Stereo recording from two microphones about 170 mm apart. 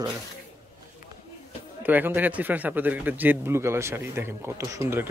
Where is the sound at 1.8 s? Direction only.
10° right (ahead or behind).